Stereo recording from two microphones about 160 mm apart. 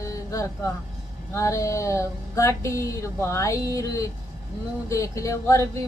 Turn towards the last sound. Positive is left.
turn(degrees=20)  # may be behind; listen again after turning